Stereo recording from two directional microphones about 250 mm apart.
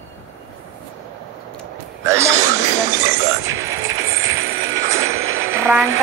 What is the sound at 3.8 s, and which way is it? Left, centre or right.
Vehicle, right.